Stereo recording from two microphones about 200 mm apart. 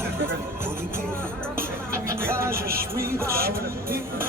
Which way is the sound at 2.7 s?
50° right (ahead or behind).